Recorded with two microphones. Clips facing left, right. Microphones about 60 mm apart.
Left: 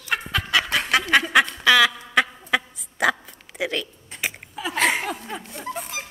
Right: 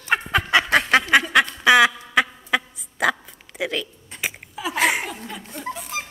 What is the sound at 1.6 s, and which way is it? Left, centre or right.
Quack, right.